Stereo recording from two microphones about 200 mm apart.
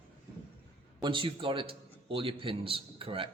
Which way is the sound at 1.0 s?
25° right (ahead or behind).